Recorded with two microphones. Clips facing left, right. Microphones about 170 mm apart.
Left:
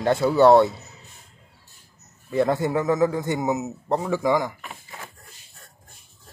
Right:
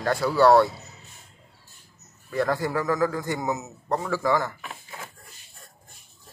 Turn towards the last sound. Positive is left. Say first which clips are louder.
# left 2 dB
turn(degrees=15)  # may be behind; listen again after turning